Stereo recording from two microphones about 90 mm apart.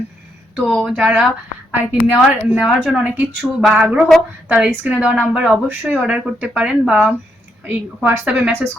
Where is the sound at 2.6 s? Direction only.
5° right (ahead or behind).